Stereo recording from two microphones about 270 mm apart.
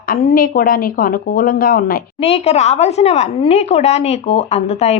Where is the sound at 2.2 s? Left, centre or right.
Left.